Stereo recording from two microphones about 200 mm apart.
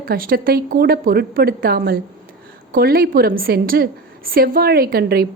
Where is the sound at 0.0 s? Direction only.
45° right (ahead or behind).